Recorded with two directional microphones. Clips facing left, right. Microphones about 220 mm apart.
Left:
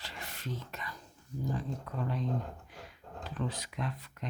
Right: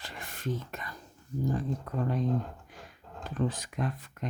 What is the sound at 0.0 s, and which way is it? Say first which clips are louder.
Whispering: right 6 dB; 50° right (ahead or behind).